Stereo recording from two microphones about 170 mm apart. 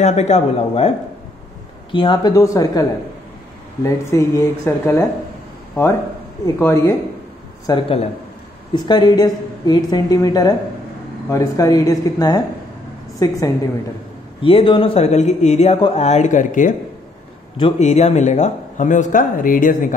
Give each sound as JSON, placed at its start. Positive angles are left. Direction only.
{"t": 0.0, "sound": "speech", "side_deg": 40}
{"t": 1.9, "sound": "a woman's voice", "side_deg": 30}
{"t": 6.4, "sound": "speech", "side_deg": 15}
{"t": 7.6, "sound": "a woman's voice", "side_deg": 30}
{"t": 14.4, "sound": "speech", "side_deg": 30}
{"t": 17.6, "sound": "speech", "side_deg": 35}